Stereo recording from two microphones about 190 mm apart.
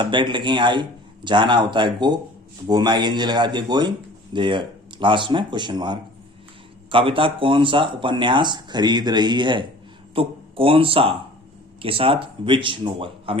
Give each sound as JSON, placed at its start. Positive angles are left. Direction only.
{"t": 0.0, "sound": "speech", "side_deg": -25}